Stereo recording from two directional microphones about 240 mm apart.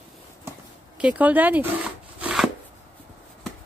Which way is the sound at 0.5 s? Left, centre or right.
Centre.